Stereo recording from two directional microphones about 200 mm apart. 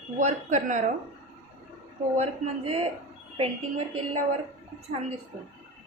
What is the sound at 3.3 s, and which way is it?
Speech, 30° right (ahead or behind).